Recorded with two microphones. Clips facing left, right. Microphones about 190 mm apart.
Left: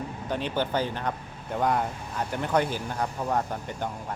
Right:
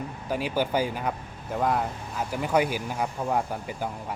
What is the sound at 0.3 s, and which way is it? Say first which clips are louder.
Speech: right 2 dB; 5° right (ahead or behind).